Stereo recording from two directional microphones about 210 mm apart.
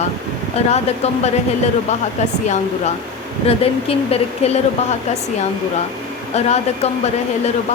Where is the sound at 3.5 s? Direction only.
30° left (ahead or behind).